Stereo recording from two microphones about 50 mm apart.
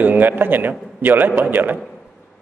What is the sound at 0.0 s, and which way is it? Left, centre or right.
A man's voice, right.